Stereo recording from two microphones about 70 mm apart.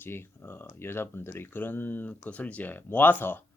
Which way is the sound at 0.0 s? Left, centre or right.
Left.